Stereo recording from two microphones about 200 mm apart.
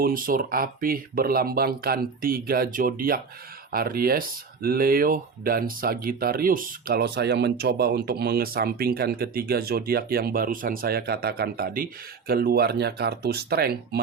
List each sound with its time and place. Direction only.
0.0 s speech: 45° right (ahead or behind)